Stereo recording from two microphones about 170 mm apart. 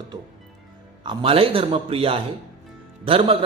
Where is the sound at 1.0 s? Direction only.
30° right (ahead or behind).